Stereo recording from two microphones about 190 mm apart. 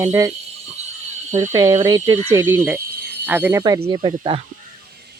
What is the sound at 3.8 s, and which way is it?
Speech, 30° right (ahead or behind).